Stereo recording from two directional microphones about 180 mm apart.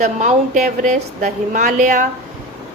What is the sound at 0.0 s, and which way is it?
A woman's voice, 45° right (ahead or behind).